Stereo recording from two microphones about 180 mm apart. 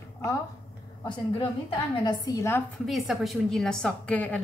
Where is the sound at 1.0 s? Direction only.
30° left (ahead or behind).